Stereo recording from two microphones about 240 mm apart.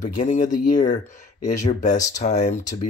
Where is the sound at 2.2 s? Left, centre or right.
Left.